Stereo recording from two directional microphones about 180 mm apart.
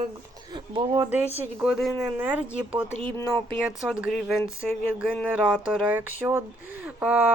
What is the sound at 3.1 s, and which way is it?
Speech, 10° left (ahead or behind).